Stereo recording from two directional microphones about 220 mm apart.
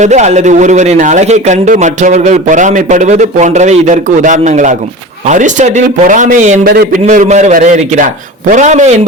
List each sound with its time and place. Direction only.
0.0 s a man's voice: 30° right (ahead or behind)